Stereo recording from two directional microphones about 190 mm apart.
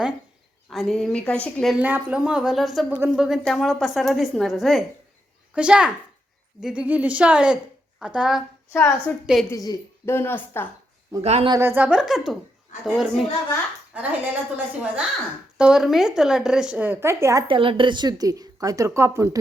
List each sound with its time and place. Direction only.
0.7 s a woman's voice: centre (ahead or behind)
1.8 s a woman's voice: 5° right (ahead or behind)
8.7 s a woman's voice: 10° left (ahead or behind)
9.2 s a woman's voice: centre (ahead or behind)
9.5 s a woman's voice: 15° left (ahead or behind)
11.2 s speech: 35° right (ahead or behind)
11.5 s a woman's voice: 10° right (ahead or behind)
13.9 s a woman's voice: 10° right (ahead or behind)
17.5 s a woman's voice: 25° right (ahead or behind)